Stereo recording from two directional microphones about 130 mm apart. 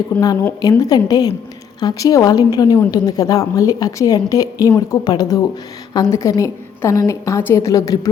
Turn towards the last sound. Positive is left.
turn(degrees=25)  # may be behind; listen again after turning